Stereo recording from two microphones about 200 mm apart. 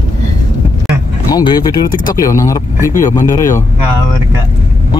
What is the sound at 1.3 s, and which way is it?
Speech, 20° left (ahead or behind).